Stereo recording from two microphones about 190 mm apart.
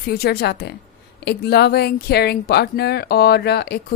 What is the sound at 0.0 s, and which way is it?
Speech, 55° left (ahead or behind).